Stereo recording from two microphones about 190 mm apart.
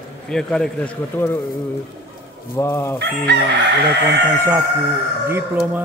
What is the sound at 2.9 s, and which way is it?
Chicken, 60° right (ahead or behind).